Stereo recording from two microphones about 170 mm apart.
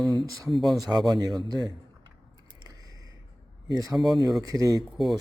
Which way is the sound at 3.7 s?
20° right (ahead or behind).